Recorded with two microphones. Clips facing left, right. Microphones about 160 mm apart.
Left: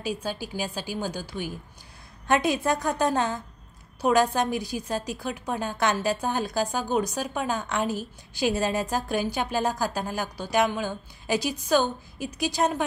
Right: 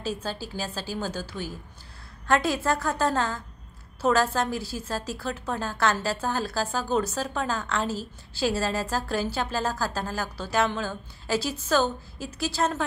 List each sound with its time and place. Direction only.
0.0 s a woman's voice: 15° left (ahead or behind)